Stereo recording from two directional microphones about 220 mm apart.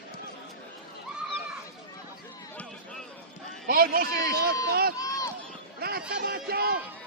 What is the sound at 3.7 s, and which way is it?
Speech, 40° right (ahead or behind).